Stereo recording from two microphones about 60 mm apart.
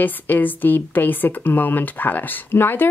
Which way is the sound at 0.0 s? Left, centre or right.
Left.